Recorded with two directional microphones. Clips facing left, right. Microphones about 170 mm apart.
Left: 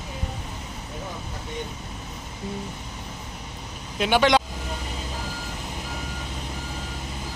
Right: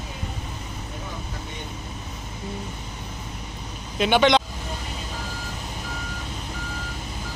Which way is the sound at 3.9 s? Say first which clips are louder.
Right 1 dB; 5° left (ahead or behind).